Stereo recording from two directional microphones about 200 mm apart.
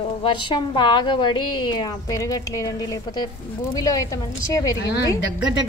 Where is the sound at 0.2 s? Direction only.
25° left (ahead or behind).